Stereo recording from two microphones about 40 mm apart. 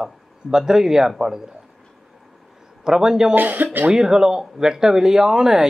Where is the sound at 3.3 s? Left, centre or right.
Right.